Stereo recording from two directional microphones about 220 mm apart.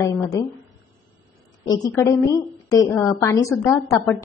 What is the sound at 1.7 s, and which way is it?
A woman's voice, 15° left (ahead or behind).